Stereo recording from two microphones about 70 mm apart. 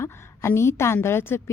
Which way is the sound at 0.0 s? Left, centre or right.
Left.